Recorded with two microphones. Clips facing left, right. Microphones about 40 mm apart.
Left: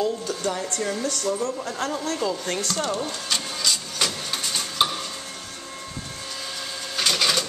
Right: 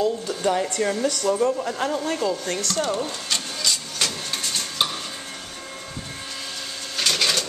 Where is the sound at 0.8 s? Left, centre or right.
Right; by 2.0 s centre.